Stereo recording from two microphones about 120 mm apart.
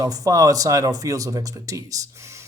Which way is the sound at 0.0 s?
30° right (ahead or behind).